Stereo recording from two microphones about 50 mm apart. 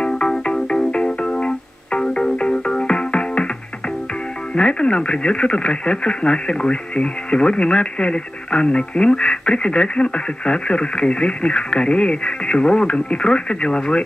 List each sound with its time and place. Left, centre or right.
0.0 s music: centre
4.6 s speech: centre